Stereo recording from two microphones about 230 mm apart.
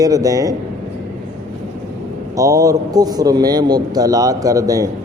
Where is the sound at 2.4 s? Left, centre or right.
Centre.